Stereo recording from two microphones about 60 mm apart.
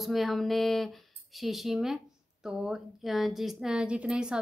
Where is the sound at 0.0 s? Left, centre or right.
Centre.